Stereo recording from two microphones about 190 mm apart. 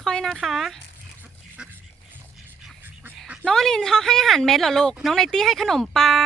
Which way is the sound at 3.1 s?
5° right (ahead or behind).